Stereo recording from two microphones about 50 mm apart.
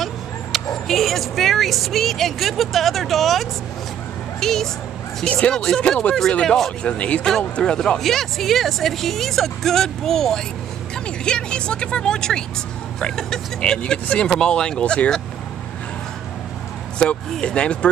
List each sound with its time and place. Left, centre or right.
0.0 s speech: centre
5.2 s speech: left
5.5 s speech: centre
6.8 s speech: left
8.0 s a woman's voice: centre
13.6 s speech: centre
17.0 s speech: centre